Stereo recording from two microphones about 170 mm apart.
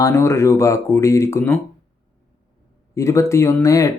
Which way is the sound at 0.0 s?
15° left (ahead or behind).